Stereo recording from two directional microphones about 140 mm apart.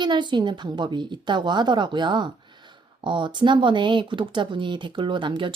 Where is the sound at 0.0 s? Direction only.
35° right (ahead or behind).